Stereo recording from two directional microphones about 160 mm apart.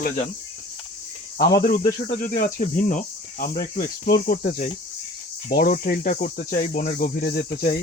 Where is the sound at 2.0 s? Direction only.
50° left (ahead or behind).